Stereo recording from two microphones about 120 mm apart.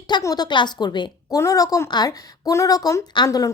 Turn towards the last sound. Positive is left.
turn(degrees=35)  # may be behind; listen again after turning